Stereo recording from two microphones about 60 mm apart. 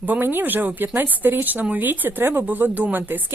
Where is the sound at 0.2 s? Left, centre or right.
Right.